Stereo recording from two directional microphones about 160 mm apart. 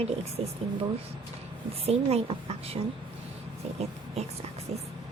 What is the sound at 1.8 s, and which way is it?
A woman's voice, 40° right (ahead or behind).